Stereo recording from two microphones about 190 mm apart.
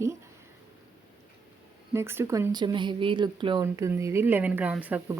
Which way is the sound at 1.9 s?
15° right (ahead or behind).